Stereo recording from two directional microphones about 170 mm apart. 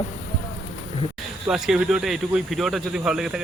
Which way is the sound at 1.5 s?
5° right (ahead or behind).